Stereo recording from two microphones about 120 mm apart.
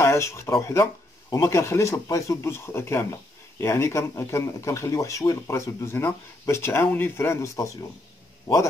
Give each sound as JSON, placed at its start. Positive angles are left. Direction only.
{"t": 0.0, "sound": "speech", "side_deg": 20}